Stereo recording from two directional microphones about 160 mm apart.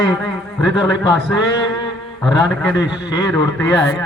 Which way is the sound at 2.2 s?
5° left (ahead or behind).